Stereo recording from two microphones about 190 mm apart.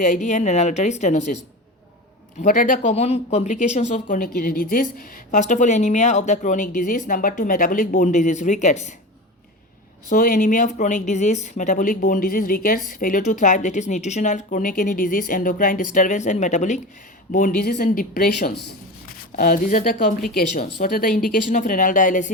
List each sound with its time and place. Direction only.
0.0 s speech: 40° left (ahead or behind)
2.4 s speech: 40° left (ahead or behind)
10.1 s speech: 45° left (ahead or behind)
17.3 s a woman's voice: 50° left (ahead or behind)